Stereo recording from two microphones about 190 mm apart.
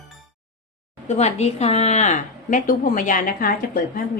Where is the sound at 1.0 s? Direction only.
35° left (ahead or behind).